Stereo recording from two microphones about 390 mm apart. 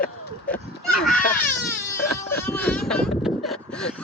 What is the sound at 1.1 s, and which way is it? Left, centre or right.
Baby cry, left.